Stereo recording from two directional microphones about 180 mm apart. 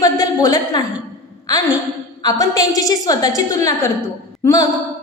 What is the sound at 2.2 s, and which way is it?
A woman's voice, 20° left (ahead or behind).